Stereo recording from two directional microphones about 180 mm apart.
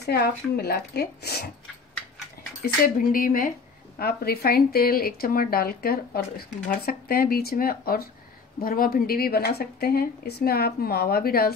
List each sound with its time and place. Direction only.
0.0 s speech: 65° left (ahead or behind)
2.6 s speech: 50° left (ahead or behind)